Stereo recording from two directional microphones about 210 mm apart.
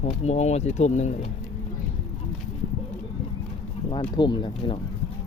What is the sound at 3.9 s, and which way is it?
Speech, 20° left (ahead or behind).